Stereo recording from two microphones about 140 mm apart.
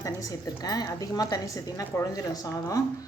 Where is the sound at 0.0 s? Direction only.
25° left (ahead or behind).